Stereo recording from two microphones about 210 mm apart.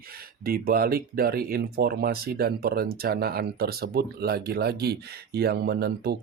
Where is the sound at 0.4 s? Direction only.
45° right (ahead or behind).